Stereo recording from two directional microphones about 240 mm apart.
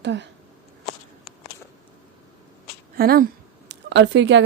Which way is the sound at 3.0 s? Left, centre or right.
Right.